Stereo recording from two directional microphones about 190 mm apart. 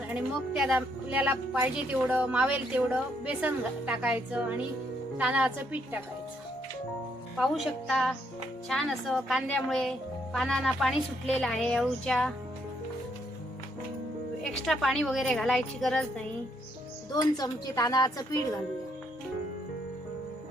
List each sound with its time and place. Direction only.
0.1 s speech: 5° right (ahead or behind)
7.3 s a woman's voice: centre (ahead or behind)
14.7 s a woman's voice: centre (ahead or behind)
17.2 s a woman's voice: 20° left (ahead or behind)